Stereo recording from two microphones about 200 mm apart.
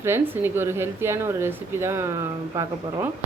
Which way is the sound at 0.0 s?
10° right (ahead or behind).